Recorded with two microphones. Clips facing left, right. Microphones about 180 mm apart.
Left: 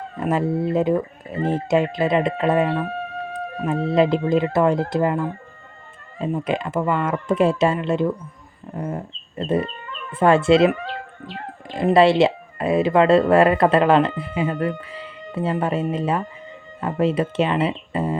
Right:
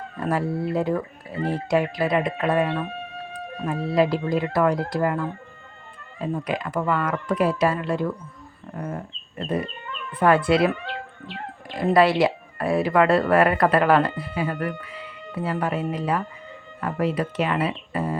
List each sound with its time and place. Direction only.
0.2 s speech: 20° left (ahead or behind)
8.7 s a sound: 20° left (ahead or behind)
10.2 s speech: 25° left (ahead or behind)
11.7 s speech: 25° left (ahead or behind)